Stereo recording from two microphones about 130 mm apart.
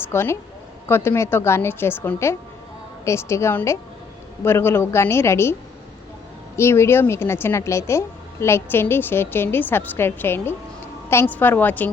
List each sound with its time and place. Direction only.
0.1 s a woman's voice: 20° left (ahead or behind)
6.6 s a woman's voice: 20° left (ahead or behind)